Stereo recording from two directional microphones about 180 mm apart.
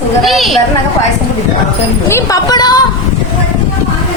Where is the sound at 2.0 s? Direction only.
15° left (ahead or behind).